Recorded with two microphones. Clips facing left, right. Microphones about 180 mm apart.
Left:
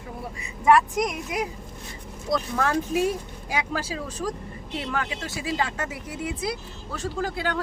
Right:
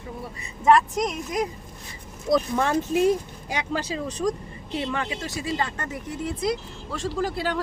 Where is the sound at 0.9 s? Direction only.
10° left (ahead or behind).